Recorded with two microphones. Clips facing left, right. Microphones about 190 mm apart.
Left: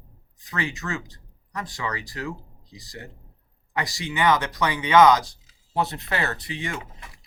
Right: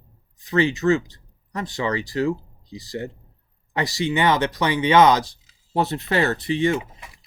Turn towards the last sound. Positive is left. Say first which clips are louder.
# right 11 dB
turn(degrees=-25)  # may be behind; listen again after turning